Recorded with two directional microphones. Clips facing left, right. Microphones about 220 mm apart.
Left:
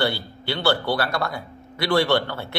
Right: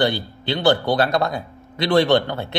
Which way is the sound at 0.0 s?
20° right (ahead or behind).